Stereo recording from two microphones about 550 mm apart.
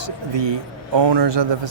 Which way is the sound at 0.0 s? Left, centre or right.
Right.